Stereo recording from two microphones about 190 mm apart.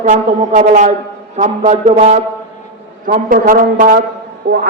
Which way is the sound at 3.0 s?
45° right (ahead or behind).